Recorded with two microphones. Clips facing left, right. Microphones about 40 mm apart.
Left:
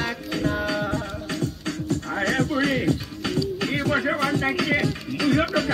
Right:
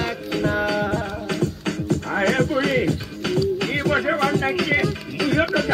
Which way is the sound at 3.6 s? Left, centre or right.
Right.